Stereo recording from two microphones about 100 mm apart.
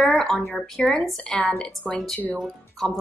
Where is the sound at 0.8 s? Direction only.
Centre (ahead or behind).